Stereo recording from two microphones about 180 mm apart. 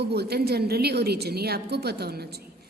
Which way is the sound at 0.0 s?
65° right (ahead or behind).